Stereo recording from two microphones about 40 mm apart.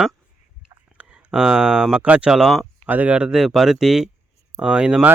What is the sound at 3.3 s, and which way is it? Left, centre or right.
Speech, centre.